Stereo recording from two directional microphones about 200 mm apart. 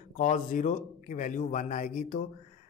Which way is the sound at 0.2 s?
40° left (ahead or behind).